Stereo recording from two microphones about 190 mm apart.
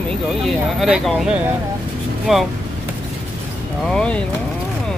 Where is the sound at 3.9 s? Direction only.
5° left (ahead or behind).